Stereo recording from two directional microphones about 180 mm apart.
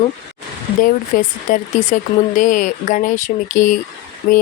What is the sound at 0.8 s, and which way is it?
Speech, 50° left (ahead or behind).